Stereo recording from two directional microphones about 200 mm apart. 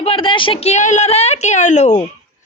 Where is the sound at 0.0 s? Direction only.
25° left (ahead or behind).